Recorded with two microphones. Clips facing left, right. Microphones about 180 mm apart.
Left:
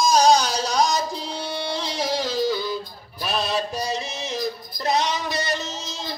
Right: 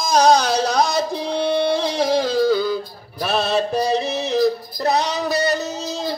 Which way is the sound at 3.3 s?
25° right (ahead or behind).